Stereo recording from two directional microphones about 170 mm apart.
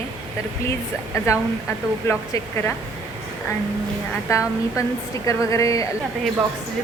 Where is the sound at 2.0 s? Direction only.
15° left (ahead or behind).